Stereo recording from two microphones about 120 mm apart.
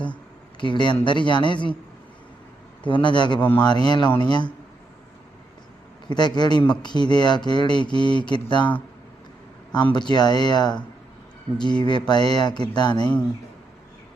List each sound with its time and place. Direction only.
0.6 s speech: 40° left (ahead or behind)
2.8 s speech: 40° left (ahead or behind)
6.1 s speech: 35° left (ahead or behind)
9.7 s speech: 40° left (ahead or behind)